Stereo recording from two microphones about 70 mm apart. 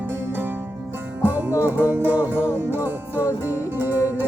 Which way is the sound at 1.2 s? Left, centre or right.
Right.